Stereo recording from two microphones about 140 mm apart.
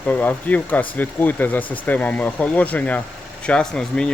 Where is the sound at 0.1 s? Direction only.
10° left (ahead or behind).